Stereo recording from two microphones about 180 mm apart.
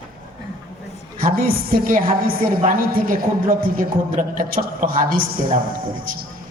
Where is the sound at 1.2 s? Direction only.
50° right (ahead or behind).